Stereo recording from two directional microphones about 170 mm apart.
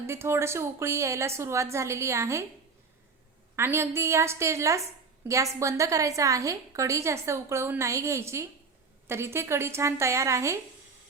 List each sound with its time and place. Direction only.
0.1 s a woman's voice: 15° right (ahead or behind)
3.5 s a woman's voice: 15° right (ahead or behind)